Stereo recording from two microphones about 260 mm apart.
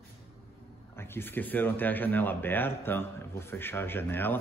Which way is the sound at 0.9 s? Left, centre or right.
Centre.